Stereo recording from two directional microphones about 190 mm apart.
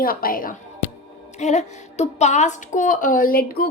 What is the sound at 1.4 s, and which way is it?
A woman's voice, 35° left (ahead or behind).